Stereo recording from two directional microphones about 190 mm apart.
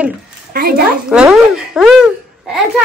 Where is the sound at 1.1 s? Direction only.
5° right (ahead or behind).